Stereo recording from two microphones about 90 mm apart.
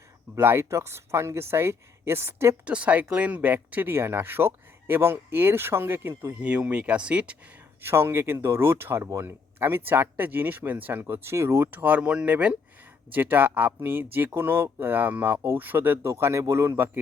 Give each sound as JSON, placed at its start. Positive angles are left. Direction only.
{"t": 0.3, "sound": "speech", "side_deg": -25}
{"t": 2.6, "sound": "speech", "side_deg": -15}
{"t": 6.4, "sound": "speech", "side_deg": -15}
{"t": 7.8, "sound": "speech", "side_deg": -25}